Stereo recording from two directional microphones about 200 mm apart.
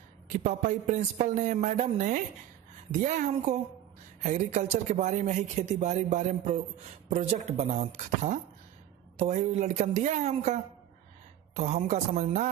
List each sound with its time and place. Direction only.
0.3 s a man's voice: 35° right (ahead or behind)